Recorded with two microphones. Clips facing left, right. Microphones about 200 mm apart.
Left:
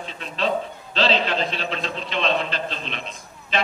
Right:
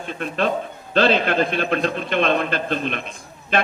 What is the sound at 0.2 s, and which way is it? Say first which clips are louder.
A man's voice: right 2 dB; 55° right (ahead or behind).